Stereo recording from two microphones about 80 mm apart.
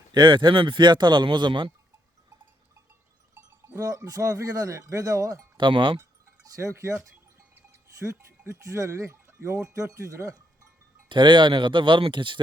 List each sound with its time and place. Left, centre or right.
0.1 s speech: right
3.3 s livestock: right
3.8 s speech: right
5.5 s speech: right
6.4 s speech: right
11.1 s speech: right